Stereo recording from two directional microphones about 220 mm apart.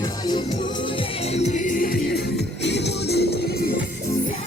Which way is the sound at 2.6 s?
50° left (ahead or behind).